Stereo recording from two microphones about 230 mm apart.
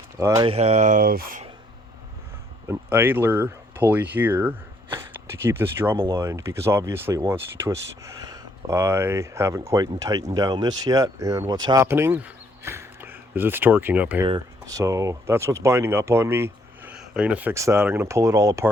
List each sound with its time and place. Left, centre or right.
0.2 s speech: centre
0.4 s speech: right
2.6 s speech: centre
14.3 s speech: centre